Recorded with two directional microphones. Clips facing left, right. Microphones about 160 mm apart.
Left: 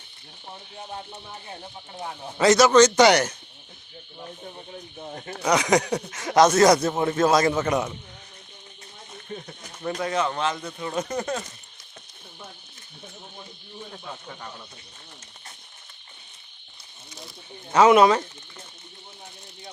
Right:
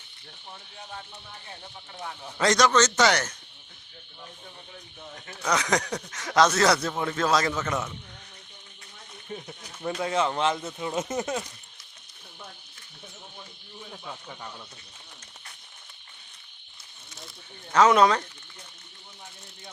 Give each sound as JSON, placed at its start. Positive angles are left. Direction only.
{"t": 0.8, "sound": "speech", "side_deg": 30}
{"t": 2.4, "sound": "speech", "side_deg": 5}
{"t": 4.2, "sound": "speech", "side_deg": 35}
{"t": 5.4, "sound": "speech", "side_deg": 15}
{"t": 6.8, "sound": "speech", "side_deg": 25}
{"t": 7.3, "sound": "a man's voice", "side_deg": 45}
{"t": 7.7, "sound": "speech", "side_deg": 15}
{"t": 9.3, "sound": "speech", "side_deg": -10}
{"t": 10.0, "sound": "speech", "side_deg": -25}
{"t": 17.7, "sound": "speech", "side_deg": 10}